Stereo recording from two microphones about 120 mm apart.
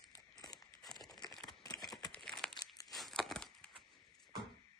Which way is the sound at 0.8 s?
Centre (ahead or behind).